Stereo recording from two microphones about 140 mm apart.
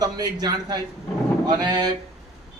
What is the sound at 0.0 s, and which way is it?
A man's voice, 30° right (ahead or behind).